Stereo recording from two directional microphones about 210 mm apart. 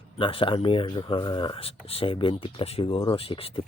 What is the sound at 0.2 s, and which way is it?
Speech, 25° left (ahead or behind).